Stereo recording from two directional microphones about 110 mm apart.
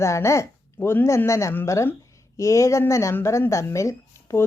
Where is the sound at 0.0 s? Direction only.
25° left (ahead or behind).